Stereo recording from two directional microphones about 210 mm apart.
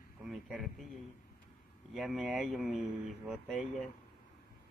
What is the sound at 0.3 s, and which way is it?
Speech, centre (ahead or behind).